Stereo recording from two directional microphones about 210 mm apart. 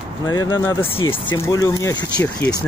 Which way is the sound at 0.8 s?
25° left (ahead or behind).